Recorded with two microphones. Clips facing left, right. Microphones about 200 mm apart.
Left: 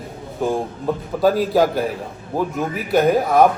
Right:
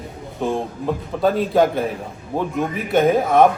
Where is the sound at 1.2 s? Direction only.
5° left (ahead or behind).